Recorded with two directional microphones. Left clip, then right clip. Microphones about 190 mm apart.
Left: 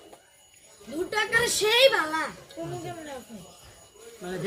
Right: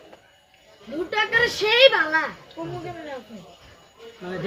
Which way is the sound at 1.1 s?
10° left (ahead or behind).